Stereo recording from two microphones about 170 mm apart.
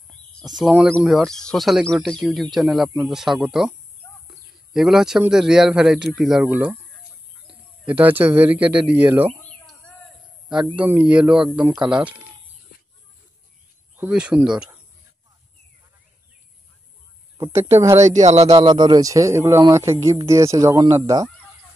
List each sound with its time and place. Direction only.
0.1 s speech: 5° left (ahead or behind)
4.7 s speech: 5° right (ahead or behind)
10.8 s speech: 10° right (ahead or behind)
13.9 s speech: 10° right (ahead or behind)
17.7 s a man's voice: 15° right (ahead or behind)